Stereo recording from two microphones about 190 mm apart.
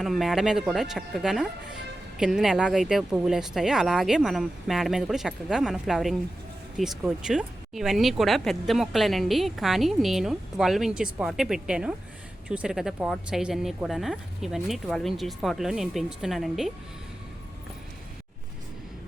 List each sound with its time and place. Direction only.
0.0 s speech: centre (ahead or behind)